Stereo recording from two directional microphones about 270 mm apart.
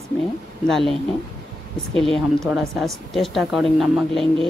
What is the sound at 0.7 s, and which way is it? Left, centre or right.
Speech, centre.